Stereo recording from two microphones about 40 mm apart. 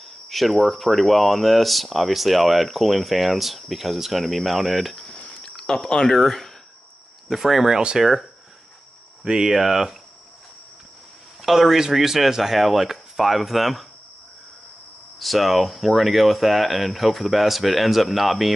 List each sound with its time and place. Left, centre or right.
0.0 s speech: centre
5.4 s a sound: centre
5.9 s speech: centre
6.1 s speech: centre
9.2 s cricket: centre
11.4 s speech: centre
15.1 s speech: centre